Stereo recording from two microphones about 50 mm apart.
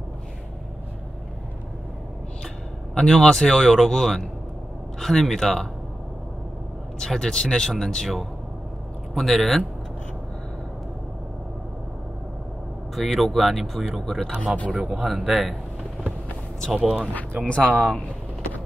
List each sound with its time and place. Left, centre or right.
2.9 s a man's voice: centre
7.0 s a man's voice: centre
12.9 s speech: centre
14.2 s a man's voice: centre
14.7 s a man's voice: centre
16.7 s a man's voice: centre
17.7 s a man's voice: centre